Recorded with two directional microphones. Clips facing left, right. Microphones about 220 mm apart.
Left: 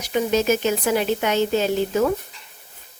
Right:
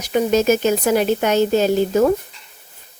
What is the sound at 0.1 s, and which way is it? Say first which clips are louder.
Speech: right 4 dB; 45° right (ahead or behind).